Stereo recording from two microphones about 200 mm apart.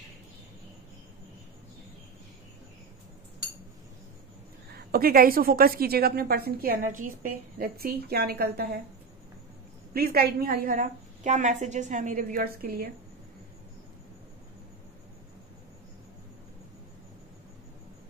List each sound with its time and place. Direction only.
4.7 s a woman's voice: 50° right (ahead or behind)
9.9 s a woman's voice: 50° right (ahead or behind)